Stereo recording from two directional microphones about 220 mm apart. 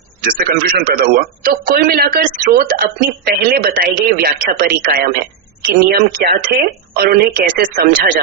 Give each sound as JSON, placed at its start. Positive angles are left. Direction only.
{"t": 0.2, "sound": "a man's voice", "side_deg": -40}